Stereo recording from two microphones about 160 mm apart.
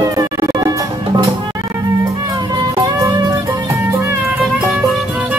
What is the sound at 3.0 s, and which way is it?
Music, 20° right (ahead or behind).